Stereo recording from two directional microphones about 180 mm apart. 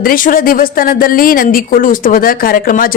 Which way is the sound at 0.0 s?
50° left (ahead or behind).